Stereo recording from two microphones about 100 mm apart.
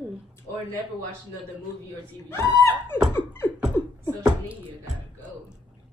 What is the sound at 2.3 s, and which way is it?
Speech, 30° left (ahead or behind).